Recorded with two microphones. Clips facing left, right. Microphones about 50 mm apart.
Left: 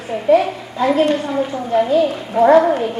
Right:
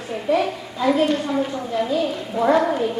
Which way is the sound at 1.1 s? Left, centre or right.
Centre.